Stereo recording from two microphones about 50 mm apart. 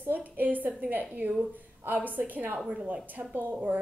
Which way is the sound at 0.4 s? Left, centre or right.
Right.